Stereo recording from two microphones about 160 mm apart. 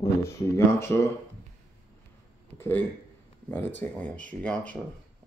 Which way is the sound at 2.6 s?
15° left (ahead or behind).